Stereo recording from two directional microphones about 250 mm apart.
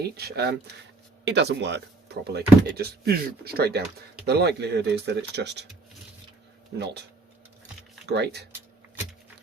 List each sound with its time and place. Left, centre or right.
0.0 s speech: right
8.0 s speech: right